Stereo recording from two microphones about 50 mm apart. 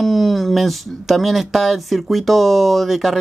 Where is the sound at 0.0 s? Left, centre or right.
Centre.